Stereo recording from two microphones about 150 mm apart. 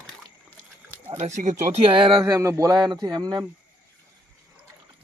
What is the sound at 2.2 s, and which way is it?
Speech, 20° right (ahead or behind).